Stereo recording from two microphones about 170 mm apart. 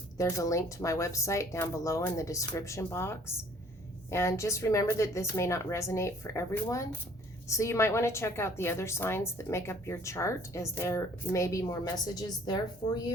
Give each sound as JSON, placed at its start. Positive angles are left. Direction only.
{"t": 0.2, "sound": "a woman's voice", "side_deg": 20}